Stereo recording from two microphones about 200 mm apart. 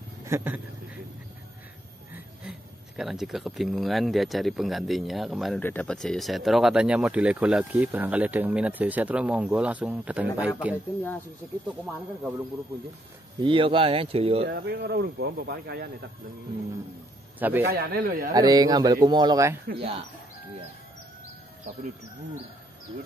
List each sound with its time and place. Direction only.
0.2 s a sound: 10° right (ahead or behind)
3.0 s speech: centre (ahead or behind)
13.4 s speech: 25° right (ahead or behind)
14.5 s speech: 55° right (ahead or behind)
17.4 s a man's voice: 10° right (ahead or behind)
17.6 s speech: 50° right (ahead or behind)
18.3 s speech: 20° right (ahead or behind)